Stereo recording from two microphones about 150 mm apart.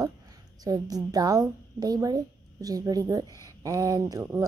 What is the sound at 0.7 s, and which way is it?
A woman's voice, 25° right (ahead or behind).